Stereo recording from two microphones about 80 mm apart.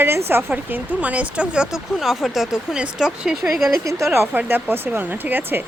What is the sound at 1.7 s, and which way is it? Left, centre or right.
Speech, centre.